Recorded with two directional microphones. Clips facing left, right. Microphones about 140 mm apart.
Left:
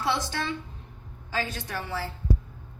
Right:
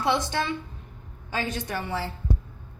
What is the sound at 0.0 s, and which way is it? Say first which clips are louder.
A woman's voice: right 3 dB; 15° right (ahead or behind).